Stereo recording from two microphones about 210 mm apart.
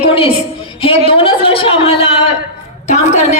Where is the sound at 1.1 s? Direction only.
25° left (ahead or behind).